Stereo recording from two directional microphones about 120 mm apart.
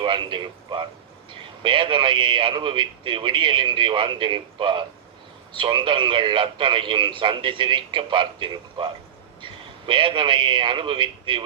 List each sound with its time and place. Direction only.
0.0 s a man's voice: 40° right (ahead or behind)